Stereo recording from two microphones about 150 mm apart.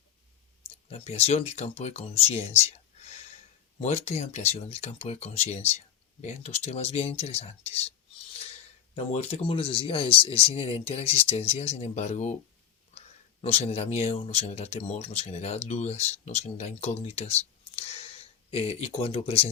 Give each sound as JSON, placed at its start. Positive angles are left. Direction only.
{"t": 0.9, "sound": "speech", "side_deg": 45}
{"t": 13.4, "sound": "speech", "side_deg": 45}